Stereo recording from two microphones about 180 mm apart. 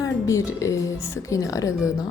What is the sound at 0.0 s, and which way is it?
Speech, 15° left (ahead or behind).